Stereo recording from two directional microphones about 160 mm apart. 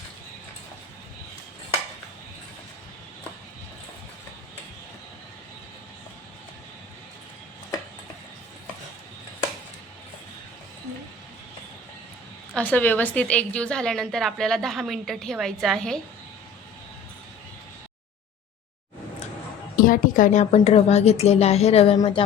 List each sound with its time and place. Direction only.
12.5 s a woman's voice: 10° left (ahead or behind)
19.7 s a woman's voice: 60° left (ahead or behind); by 22.2 s 35° left (ahead or behind)